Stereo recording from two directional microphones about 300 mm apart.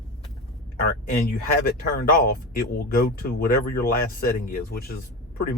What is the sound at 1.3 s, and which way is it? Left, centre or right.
Speech, left.